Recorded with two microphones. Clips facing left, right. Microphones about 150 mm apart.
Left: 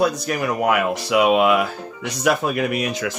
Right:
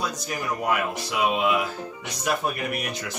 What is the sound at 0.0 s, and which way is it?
Speech, 70° left (ahead or behind).